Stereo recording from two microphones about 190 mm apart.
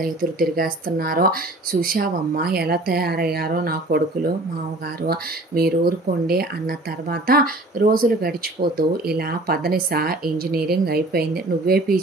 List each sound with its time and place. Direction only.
0.0 s speech: 50° right (ahead or behind)